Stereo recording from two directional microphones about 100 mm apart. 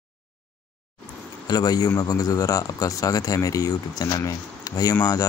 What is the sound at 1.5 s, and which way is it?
Speech, 40° left (ahead or behind).